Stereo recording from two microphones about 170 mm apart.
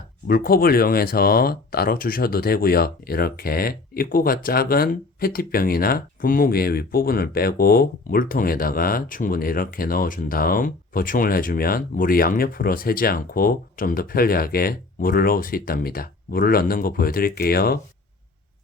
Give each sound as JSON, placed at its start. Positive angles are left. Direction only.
{"t": 0.3, "sound": "speech", "side_deg": 60}